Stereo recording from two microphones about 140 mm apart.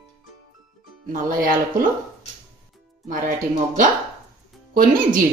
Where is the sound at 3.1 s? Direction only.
70° right (ahead or behind).